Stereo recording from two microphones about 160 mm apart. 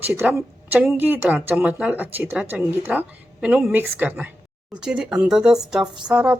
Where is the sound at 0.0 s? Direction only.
10° right (ahead or behind).